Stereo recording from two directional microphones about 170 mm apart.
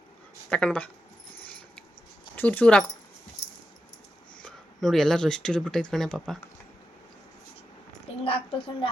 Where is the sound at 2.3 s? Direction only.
10° left (ahead or behind).